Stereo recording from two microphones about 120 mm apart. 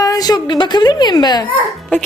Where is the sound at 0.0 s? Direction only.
30° left (ahead or behind).